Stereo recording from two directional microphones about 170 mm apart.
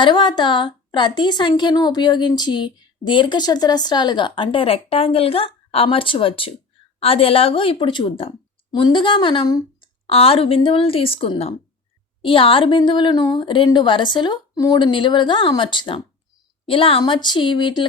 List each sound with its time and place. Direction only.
0.0 s a woman's voice: 25° left (ahead or behind)
10.1 s a woman's voice: 35° left (ahead or behind)